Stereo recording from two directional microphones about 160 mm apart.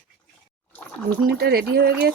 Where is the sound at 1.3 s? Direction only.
85° right.